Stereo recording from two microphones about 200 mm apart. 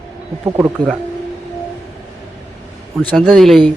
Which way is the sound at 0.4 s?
15° right (ahead or behind).